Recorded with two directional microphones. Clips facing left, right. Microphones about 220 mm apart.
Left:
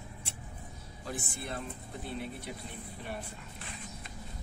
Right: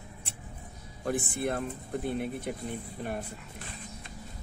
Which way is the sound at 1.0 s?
55° right (ahead or behind).